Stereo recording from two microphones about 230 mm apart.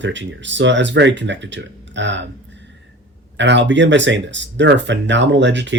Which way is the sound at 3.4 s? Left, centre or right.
Right.